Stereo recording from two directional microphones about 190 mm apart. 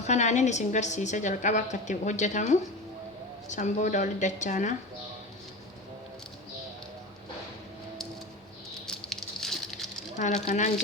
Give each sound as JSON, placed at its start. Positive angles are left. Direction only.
{"t": 0.0, "sound": "a woman's voice", "side_deg": 35}
{"t": 8.9, "sound": "patter", "side_deg": 0}
{"t": 10.4, "sound": "a woman's voice", "side_deg": 40}